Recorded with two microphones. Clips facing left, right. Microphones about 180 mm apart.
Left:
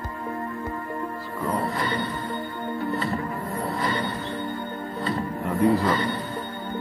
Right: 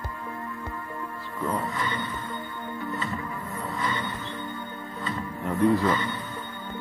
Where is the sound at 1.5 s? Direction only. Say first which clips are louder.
Left 4 dB; 35° left (ahead or behind).